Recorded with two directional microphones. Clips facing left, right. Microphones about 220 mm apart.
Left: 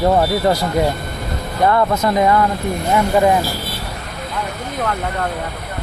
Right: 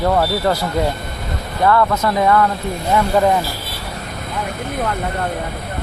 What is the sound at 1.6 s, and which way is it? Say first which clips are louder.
Speech: even; 25° left (ahead or behind).